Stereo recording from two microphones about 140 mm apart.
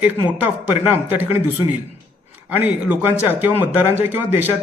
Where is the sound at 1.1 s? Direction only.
15° right (ahead or behind).